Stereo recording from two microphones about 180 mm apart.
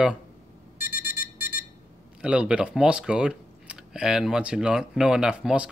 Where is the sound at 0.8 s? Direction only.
10° right (ahead or behind).